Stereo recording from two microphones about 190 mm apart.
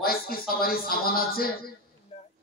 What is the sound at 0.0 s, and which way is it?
A man's voice, 50° left (ahead or behind).